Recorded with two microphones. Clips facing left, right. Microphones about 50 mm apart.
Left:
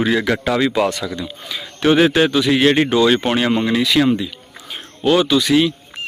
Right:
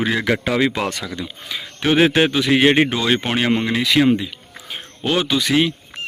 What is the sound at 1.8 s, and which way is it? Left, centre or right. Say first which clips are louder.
Speech: left 2 dB; centre.